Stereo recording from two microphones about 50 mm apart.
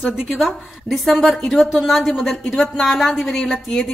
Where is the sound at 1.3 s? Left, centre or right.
Centre.